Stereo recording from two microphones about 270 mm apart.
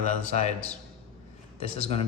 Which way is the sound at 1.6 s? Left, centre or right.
Left.